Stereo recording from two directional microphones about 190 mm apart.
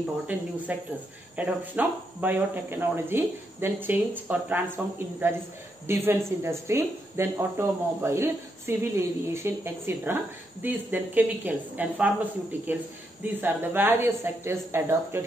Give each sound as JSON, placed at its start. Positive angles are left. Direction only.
{"t": 0.7, "sound": "a woman's voice", "side_deg": -10}
{"t": 13.2, "sound": "a woman's voice", "side_deg": -10}